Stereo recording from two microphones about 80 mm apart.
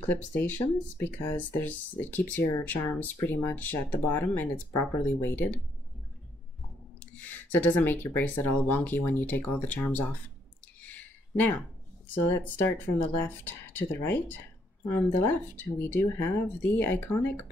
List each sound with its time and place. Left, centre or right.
0.1 s speech: left
7.0 s speech: left
10.8 s a sound: left
12.7 s speech: left